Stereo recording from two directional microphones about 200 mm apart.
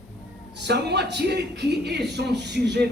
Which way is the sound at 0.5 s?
60° right (ahead or behind).